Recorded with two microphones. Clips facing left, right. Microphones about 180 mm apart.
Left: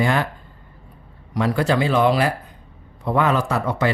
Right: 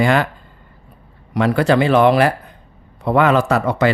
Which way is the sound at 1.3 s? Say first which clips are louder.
Right 5 dB; 70° right (ahead or behind).